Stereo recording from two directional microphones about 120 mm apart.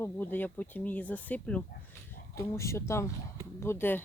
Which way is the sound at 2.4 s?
25° left (ahead or behind).